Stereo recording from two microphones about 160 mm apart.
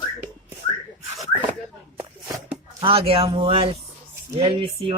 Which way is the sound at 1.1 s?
20° right (ahead or behind).